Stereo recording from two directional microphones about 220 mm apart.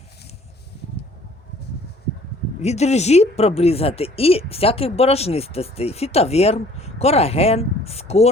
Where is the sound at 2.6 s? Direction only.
30° left (ahead or behind).